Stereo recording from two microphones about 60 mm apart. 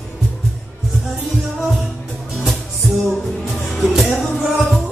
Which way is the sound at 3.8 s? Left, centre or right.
Centre.